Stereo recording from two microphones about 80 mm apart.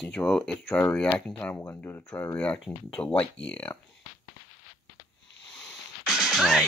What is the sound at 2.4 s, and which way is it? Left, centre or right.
Speech, centre.